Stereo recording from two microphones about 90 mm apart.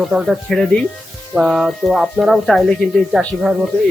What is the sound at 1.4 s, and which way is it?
Speech, 5° right (ahead or behind).